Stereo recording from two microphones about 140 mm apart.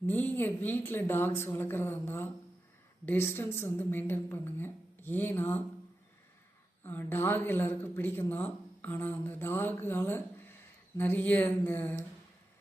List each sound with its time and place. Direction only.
0.0 s speech: 15° left (ahead or behind)
6.8 s speech: 15° left (ahead or behind)